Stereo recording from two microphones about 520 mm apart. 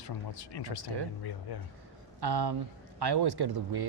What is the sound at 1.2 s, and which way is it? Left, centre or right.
Speech, left.